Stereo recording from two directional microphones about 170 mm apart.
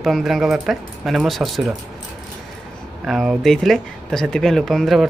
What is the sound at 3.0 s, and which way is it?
Speech, centre (ahead or behind).